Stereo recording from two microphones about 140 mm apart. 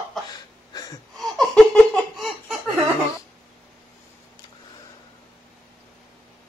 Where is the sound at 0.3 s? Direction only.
25° left (ahead or behind).